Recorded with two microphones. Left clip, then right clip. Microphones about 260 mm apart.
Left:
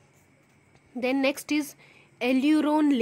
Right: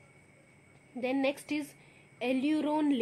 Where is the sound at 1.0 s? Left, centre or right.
Left.